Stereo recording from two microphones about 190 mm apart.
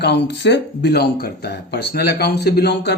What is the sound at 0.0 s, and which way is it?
Speech, 65° left (ahead or behind).